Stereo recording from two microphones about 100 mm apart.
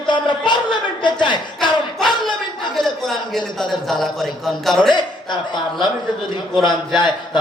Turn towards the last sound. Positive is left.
turn(degrees=50)  # may be behind; listen again after turning